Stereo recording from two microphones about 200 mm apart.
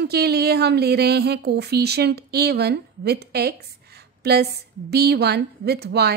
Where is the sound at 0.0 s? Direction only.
55° right (ahead or behind).